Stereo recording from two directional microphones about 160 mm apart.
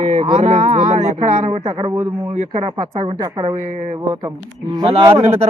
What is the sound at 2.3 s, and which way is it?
Speech, 40° right (ahead or behind).